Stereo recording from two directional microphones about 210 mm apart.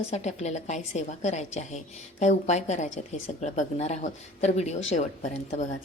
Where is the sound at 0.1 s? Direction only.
30° left (ahead or behind).